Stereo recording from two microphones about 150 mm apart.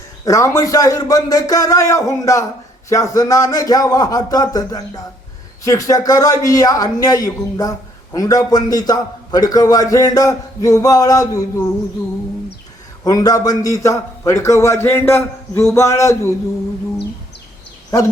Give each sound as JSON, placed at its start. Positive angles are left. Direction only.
{"t": 0.3, "sound": "a man's voice", "side_deg": 20}
{"t": 13.1, "sound": "a man's voice", "side_deg": 25}